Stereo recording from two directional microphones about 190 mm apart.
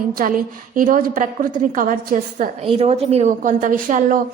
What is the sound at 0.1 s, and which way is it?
A woman's voice, 50° right (ahead or behind).